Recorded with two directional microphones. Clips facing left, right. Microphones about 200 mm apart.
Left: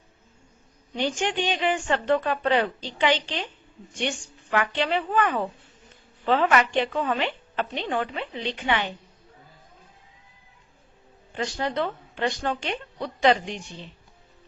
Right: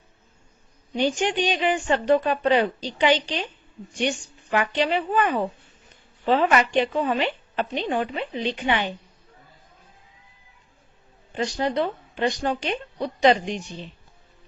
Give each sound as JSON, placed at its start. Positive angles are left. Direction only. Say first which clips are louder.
{"t": 0.9, "sound": "a woman's voice", "louder": "right 3 dB", "side_deg": -15}
{"t": 4.5, "sound": "a woman's voice", "louder": "right 2 dB", "side_deg": -20}
{"t": 11.5, "sound": "a woman's voice", "louder": "right 3 dB", "side_deg": -15}